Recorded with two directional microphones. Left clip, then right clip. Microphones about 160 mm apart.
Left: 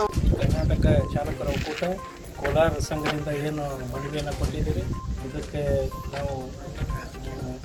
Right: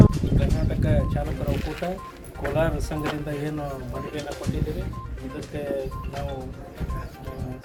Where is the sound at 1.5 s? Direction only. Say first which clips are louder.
Left 1 dB; 55° right (ahead or behind).